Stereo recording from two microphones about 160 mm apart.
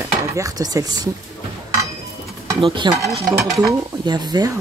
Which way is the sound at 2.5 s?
30° right (ahead or behind).